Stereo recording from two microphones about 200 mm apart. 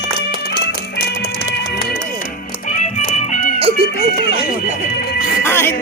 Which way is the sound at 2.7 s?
40° left (ahead or behind).